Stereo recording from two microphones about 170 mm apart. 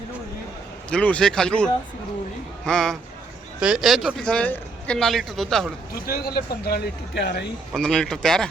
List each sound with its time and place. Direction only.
0.9 s a man's voice: 5° left (ahead or behind)
6.1 s speech: 60° left (ahead or behind)
7.2 s speech: 75° left (ahead or behind)
7.7 s a man's voice: 5° left (ahead or behind)